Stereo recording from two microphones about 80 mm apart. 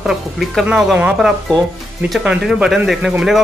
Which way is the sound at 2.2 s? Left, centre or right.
Centre.